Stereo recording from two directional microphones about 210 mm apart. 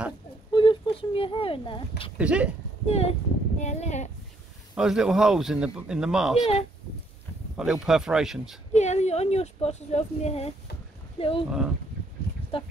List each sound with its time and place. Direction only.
0.5 s a sound: 20° left (ahead or behind)
2.1 s speech: 5° right (ahead or behind)
2.9 s speech: 30° left (ahead or behind)
4.7 s speech: 5° right (ahead or behind)
7.5 s speech: centre (ahead or behind)
8.7 s speech: 30° left (ahead or behind)
12.5 s speech: 25° left (ahead or behind)